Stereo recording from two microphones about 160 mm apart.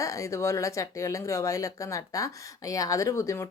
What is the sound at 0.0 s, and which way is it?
Speech, 20° left (ahead or behind).